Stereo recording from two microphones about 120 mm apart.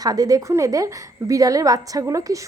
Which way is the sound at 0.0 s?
30° right (ahead or behind).